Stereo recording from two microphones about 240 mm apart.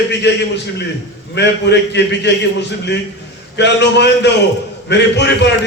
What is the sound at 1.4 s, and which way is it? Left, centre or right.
A man's voice, left.